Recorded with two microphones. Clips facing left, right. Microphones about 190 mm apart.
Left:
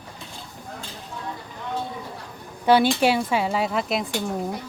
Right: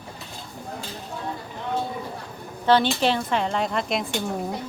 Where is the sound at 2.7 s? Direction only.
10° left (ahead or behind).